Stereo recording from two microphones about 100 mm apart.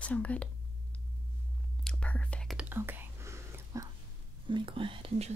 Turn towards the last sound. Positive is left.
turn(degrees=-75)  # may be behind; listen again after turning